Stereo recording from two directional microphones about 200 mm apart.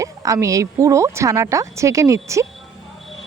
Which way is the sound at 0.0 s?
15° right (ahead or behind).